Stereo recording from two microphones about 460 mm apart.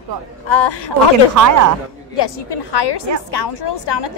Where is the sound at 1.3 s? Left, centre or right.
Right.